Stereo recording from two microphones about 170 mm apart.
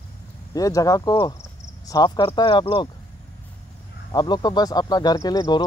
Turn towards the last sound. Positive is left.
turn(degrees=25)  # may be behind; listen again after turning